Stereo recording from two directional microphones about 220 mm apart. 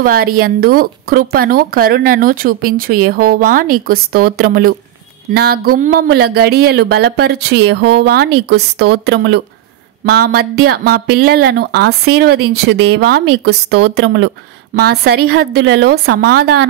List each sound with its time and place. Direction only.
0.0 s speech: 40° right (ahead or behind)